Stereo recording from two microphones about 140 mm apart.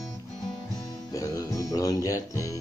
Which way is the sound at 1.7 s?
25° left (ahead or behind).